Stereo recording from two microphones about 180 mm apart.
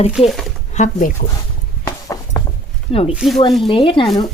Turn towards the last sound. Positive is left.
turn(degrees=30)  # may be behind; listen again after turning